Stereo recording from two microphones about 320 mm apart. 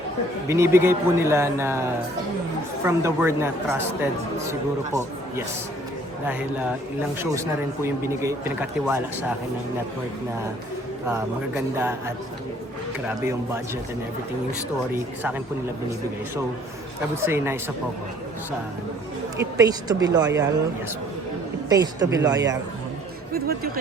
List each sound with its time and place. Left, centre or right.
0.4 s a man's voice: centre
2.8 s a man's voice: centre
6.2 s speech: centre
8.0 s a man's voice: centre
11.1 s a man's voice: centre
14.9 s speech: centre
17.2 s a man's voice: centre
19.4 s a man's voice: centre
21.7 s a man's voice: centre
23.3 s speech: right